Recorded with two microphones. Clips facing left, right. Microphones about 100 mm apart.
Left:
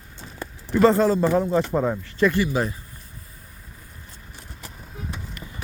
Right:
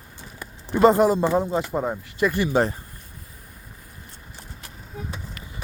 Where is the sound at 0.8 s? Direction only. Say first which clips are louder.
Right 1 dB; 15° right (ahead or behind).